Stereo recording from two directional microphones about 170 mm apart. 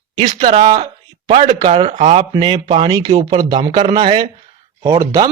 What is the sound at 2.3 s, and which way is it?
Speech, 25° right (ahead or behind).